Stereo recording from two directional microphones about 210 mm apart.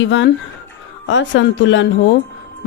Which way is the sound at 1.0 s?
60° left (ahead or behind).